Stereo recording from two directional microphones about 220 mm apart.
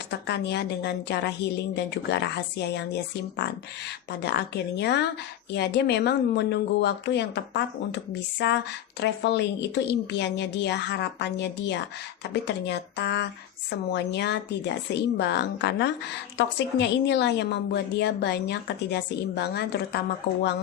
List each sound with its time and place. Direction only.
0.1 s a woman's voice: 50° left (ahead or behind)